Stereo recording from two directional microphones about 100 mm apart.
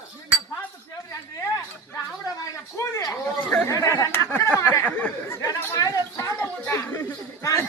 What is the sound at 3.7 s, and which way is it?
Chatter, 30° left (ahead or behind).